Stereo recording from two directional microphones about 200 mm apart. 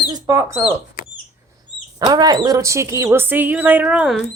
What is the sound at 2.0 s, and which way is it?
Speech, 20° right (ahead or behind).